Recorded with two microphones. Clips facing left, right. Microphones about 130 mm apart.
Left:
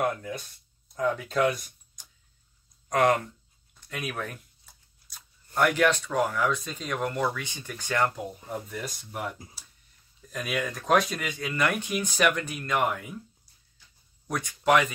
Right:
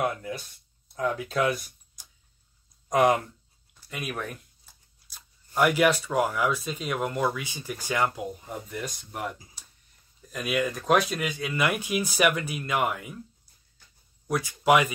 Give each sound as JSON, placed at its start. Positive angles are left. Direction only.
{"t": 0.0, "sound": "speech", "side_deg": -5}
{"t": 13.8, "sound": "a sound", "side_deg": -50}
{"t": 14.2, "sound": "speech", "side_deg": -5}